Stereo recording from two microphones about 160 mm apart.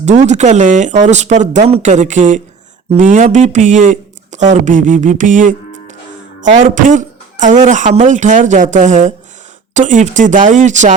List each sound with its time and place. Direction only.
0.0 s speech: 45° right (ahead or behind)